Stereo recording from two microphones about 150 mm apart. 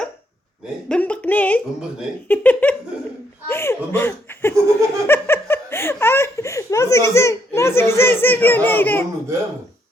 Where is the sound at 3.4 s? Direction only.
15° left (ahead or behind).